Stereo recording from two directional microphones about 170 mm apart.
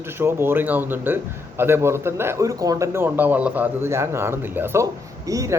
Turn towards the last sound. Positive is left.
turn(degrees=-20)  # may be behind; listen again after turning